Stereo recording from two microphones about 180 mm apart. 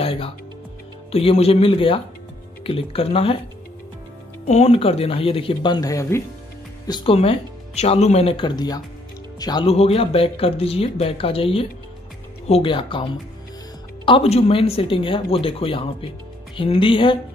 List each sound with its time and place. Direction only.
0.0 s music: 30° left (ahead or behind)
1.1 s speech: 35° left (ahead or behind)
4.5 s speech: 35° left (ahead or behind)
7.2 s speech: 35° left (ahead or behind)